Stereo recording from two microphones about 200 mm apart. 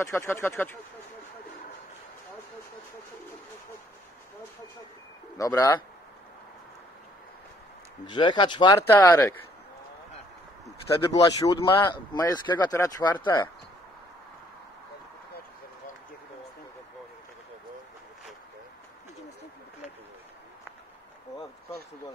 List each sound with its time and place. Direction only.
0.0 s speech: 15° left (ahead or behind)
5.4 s speech: 15° left (ahead or behind)
8.1 s speech: 25° left (ahead or behind)
11.1 s speech: 15° left (ahead or behind)